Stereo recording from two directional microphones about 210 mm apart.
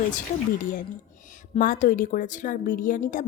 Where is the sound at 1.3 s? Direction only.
40° left (ahead or behind).